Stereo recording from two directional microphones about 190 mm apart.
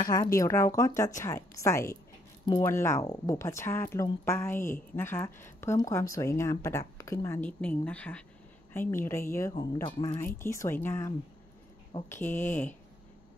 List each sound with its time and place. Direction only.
0.0 s a woman's voice: 20° left (ahead or behind)